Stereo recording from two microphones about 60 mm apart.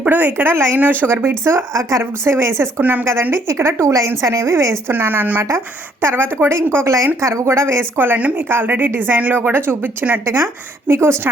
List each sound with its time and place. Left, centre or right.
0.0 s a woman's voice: right
0.8 s a woman's voice: right
1.1 s a woman's voice: right
4.9 s a woman's voice: right
5.4 s speech: right
7.2 s a woman's voice: right
10.2 s speech: right